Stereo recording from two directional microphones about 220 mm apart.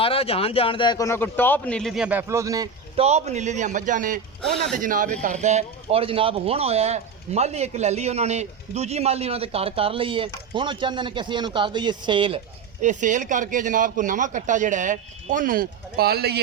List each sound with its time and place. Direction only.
0.0 s a man's voice: 25° left (ahead or behind); by 3.0 s 15° right (ahead or behind)
3.0 s speech: 30° right (ahead or behind)
4.4 s a man's voice: centre (ahead or behind)
4.8 s speech: 40° right (ahead or behind); by 12.4 s 20° right (ahead or behind)
12.8 s speech: 35° right (ahead or behind)